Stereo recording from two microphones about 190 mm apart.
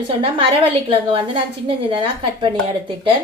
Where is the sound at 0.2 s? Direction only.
30° right (ahead or behind).